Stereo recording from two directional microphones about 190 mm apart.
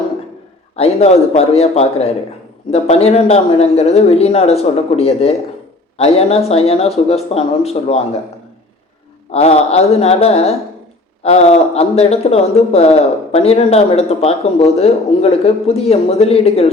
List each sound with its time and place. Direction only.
0.8 s a man's voice: 35° left (ahead or behind)
9.3 s a man's voice: 35° left (ahead or behind)